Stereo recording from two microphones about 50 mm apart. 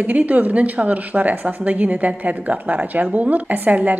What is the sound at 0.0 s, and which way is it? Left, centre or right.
A woman's voice, right.